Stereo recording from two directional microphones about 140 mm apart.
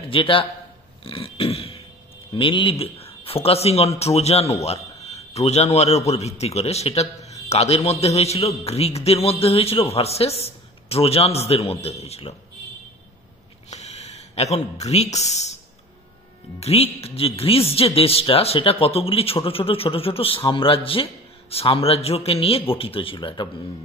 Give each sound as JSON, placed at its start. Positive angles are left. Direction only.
{"t": 0.1, "sound": "speech", "side_deg": 40}
{"t": 1.0, "sound": "a sound", "side_deg": 40}
{"t": 2.3, "sound": "a man's voice", "side_deg": 40}
{"t": 13.7, "sound": "speech", "side_deg": 50}
{"t": 16.5, "sound": "a man's voice", "side_deg": 45}